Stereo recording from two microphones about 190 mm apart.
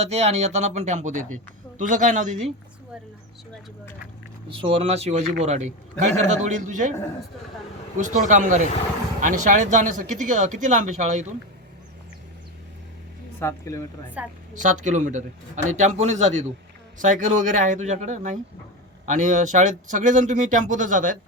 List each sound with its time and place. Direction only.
0.0 s speech: 35° right (ahead or behind)
4.4 s speech: 30° right (ahead or behind)
7.9 s speech: 40° right (ahead or behind)
13.4 s speech: 15° left (ahead or behind)
14.2 s a woman's voice: 5° right (ahead or behind)
14.6 s speech: 40° right (ahead or behind)